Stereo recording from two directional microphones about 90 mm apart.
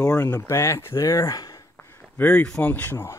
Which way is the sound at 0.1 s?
25° left (ahead or behind).